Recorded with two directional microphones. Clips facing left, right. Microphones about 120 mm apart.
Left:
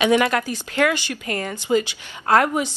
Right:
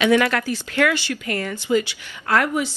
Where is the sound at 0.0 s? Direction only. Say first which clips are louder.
Even; 20° left (ahead or behind).